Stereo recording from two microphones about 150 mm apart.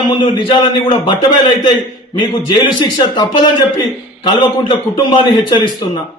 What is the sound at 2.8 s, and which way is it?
A man's voice, 30° left (ahead or behind).